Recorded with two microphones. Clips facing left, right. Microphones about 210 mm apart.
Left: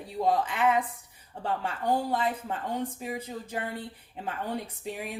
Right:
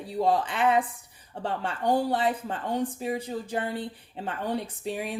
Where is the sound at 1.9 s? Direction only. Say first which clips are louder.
Right 3 dB; 30° right (ahead or behind).